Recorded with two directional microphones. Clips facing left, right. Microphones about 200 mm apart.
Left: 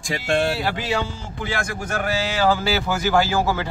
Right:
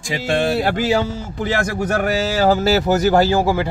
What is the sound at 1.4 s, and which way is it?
A man's voice, 40° right (ahead or behind).